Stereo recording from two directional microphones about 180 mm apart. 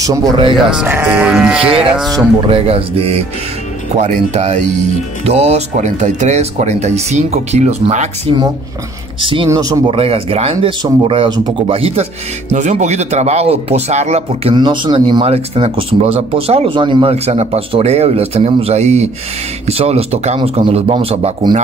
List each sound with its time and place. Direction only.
0.0 s speech: 20° right (ahead or behind)
0.7 s speech: 10° right (ahead or behind)
2.5 s speech: 30° right (ahead or behind)
9.9 s speech: 30° right (ahead or behind)
14.5 s speech: 25° right (ahead or behind)